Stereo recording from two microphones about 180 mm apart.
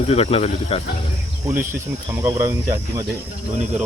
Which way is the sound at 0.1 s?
35° left (ahead or behind).